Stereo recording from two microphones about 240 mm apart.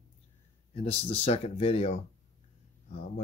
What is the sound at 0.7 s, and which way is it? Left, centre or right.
Speech, left.